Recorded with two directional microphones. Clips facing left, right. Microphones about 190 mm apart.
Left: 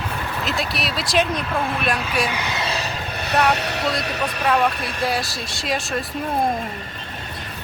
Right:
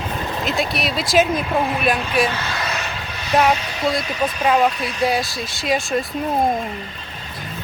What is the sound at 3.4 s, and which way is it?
Speech, 70° left (ahead or behind).